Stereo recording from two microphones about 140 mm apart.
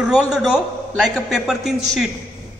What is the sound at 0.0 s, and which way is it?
A man's voice, 5° right (ahead or behind).